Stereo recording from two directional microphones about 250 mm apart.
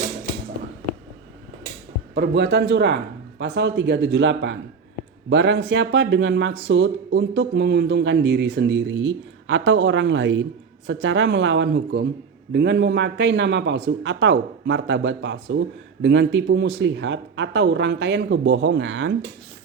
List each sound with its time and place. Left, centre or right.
2.1 s a man's voice: right